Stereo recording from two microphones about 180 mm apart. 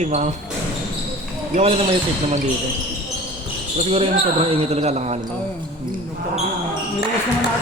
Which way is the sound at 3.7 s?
35° right (ahead or behind).